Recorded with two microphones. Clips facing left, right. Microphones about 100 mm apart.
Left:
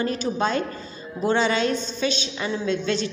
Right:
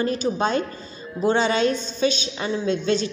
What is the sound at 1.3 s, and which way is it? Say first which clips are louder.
A woman's voice: right 1 dB; 35° right (ahead or behind).